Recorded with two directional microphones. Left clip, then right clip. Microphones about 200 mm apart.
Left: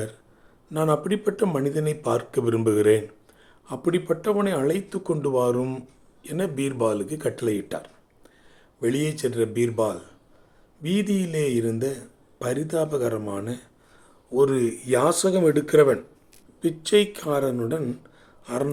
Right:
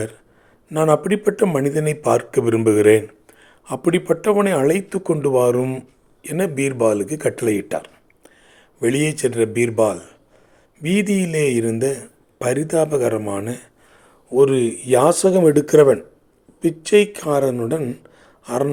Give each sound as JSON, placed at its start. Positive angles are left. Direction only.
{"t": 0.7, "sound": "speech", "side_deg": -20}